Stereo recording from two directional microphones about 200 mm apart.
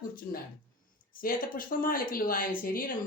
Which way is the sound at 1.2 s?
45° left (ahead or behind).